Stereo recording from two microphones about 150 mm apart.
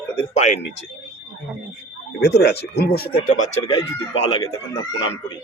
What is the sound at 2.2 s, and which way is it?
Speech, 90° left.